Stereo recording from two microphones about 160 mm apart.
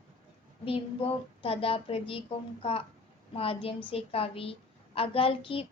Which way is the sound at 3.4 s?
35° left (ahead or behind).